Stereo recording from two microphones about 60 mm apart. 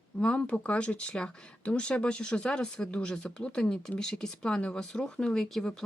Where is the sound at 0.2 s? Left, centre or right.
Centre.